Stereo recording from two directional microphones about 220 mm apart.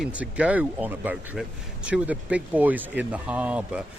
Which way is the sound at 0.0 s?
5° right (ahead or behind).